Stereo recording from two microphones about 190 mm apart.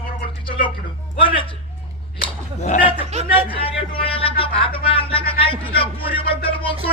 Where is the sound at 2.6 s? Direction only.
35° left (ahead or behind).